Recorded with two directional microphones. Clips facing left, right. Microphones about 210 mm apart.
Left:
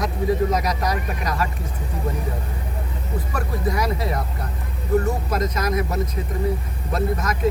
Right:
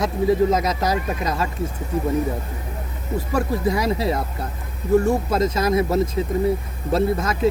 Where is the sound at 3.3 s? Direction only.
25° right (ahead or behind).